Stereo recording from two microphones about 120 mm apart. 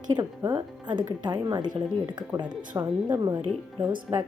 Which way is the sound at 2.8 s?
25° right (ahead or behind).